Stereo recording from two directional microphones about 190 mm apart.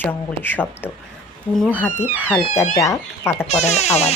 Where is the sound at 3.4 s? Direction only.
35° left (ahead or behind).